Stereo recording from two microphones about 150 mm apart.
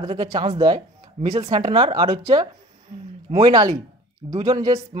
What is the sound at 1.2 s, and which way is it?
Speech, 55° right (ahead or behind).